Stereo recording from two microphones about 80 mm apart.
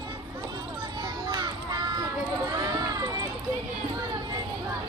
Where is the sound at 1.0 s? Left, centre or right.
Right.